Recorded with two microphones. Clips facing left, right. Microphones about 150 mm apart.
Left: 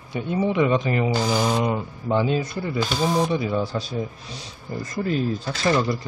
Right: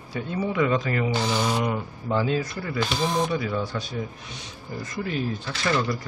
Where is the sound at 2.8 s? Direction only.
5° left (ahead or behind).